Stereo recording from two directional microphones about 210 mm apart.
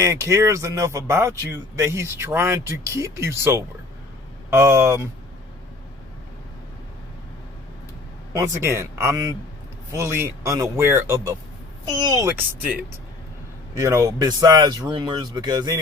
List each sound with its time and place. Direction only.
0.0 s speech: 15° right (ahead or behind)
8.3 s speech: 15° right (ahead or behind)
13.7 s speech: 15° right (ahead or behind)